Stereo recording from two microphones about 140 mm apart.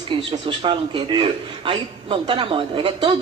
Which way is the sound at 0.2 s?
40° right (ahead or behind).